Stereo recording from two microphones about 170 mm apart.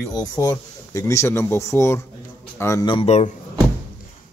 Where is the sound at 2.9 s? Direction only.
35° left (ahead or behind).